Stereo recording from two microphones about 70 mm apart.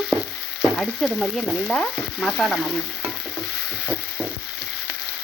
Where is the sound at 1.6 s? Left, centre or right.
Centre.